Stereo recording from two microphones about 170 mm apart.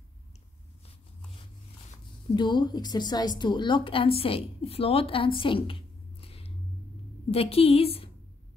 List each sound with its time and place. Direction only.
2.3 s a woman's voice: 25° left (ahead or behind)
6.2 s a sound: 35° left (ahead or behind)
7.2 s a woman's voice: 35° left (ahead or behind)